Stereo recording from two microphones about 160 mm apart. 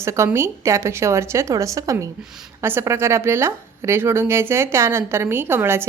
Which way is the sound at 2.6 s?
15° right (ahead or behind).